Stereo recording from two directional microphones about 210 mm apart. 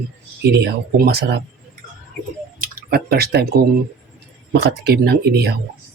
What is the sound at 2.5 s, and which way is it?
Speech, 45° right (ahead or behind).